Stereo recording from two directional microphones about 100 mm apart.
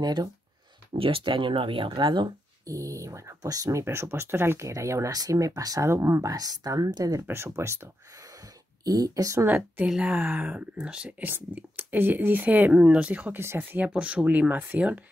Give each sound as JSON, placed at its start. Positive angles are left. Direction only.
{"t": 0.0, "sound": "speech", "side_deg": -40}
{"t": 0.9, "sound": "speech", "side_deg": -65}
{"t": 2.6, "sound": "speech", "side_deg": -35}
{"t": 3.8, "sound": "speech", "side_deg": -25}
{"t": 7.2, "sound": "speech", "side_deg": -25}
{"t": 8.8, "sound": "speech", "side_deg": -40}
{"t": 9.8, "sound": "speech", "side_deg": -5}